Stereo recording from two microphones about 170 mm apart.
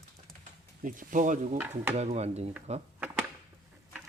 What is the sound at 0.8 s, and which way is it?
Speech, 50° right (ahead or behind).